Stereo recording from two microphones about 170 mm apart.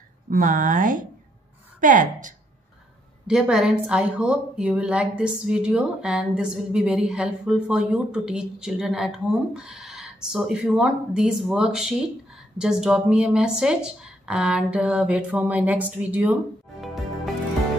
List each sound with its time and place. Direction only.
0.3 s speech: 50° right (ahead or behind)
3.3 s a woman's voice: 5° right (ahead or behind)